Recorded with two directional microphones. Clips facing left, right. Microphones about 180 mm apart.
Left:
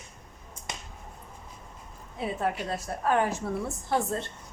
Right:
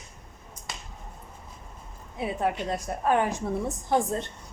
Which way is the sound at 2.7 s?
15° right (ahead or behind).